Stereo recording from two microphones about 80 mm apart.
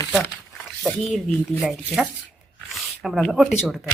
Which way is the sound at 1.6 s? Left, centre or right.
Centre.